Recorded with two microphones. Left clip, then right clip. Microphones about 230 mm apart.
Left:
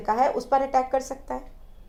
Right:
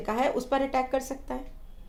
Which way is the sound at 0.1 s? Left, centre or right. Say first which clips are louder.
Left 5 dB; right.